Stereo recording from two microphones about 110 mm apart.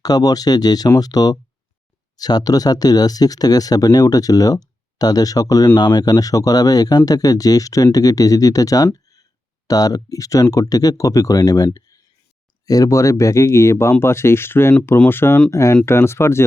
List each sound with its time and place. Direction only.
0.0 s speech: 35° left (ahead or behind)